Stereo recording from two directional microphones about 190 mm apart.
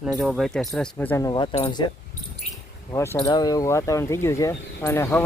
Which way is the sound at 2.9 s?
15° left (ahead or behind).